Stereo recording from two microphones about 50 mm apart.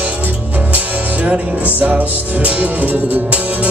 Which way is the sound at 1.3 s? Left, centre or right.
Right.